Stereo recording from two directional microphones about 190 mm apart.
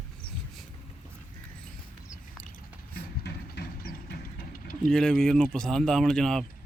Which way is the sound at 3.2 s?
60° left (ahead or behind).